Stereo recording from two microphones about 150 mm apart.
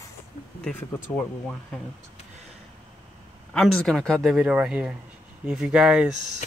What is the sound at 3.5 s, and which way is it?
A man's voice, 5° left (ahead or behind).